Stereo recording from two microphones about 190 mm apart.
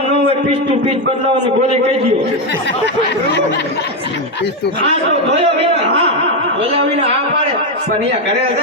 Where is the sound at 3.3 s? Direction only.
60° left (ahead or behind).